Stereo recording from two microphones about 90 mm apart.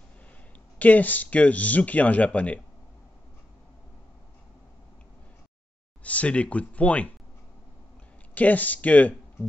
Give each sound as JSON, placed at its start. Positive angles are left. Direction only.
{"t": 0.7, "sound": "speech", "side_deg": 20}
{"t": 6.0, "sound": "speech", "side_deg": 15}
{"t": 8.4, "sound": "speech", "side_deg": 15}